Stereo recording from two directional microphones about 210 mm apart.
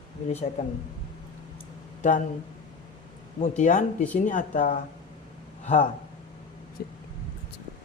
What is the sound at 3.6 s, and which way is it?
Speech, 35° left (ahead or behind).